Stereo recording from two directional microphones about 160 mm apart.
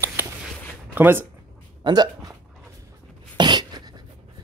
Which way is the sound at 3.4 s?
25° right (ahead or behind).